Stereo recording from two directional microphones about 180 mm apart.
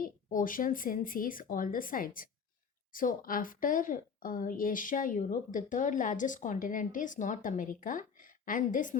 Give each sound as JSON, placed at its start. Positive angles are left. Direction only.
{"t": 0.0, "sound": "a woman's voice", "side_deg": 50}